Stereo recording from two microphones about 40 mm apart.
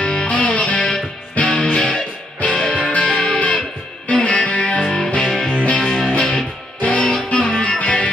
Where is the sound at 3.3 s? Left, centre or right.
Left.